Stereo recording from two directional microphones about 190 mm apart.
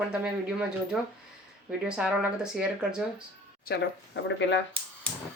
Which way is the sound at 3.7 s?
70° left (ahead or behind).